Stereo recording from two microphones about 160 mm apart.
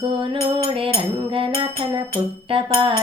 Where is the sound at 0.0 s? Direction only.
35° right (ahead or behind).